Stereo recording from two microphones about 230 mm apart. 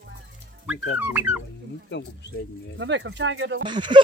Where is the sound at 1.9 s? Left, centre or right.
Left.